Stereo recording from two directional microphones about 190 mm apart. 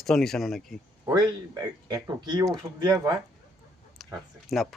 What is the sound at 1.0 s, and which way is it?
Speech, 20° right (ahead or behind).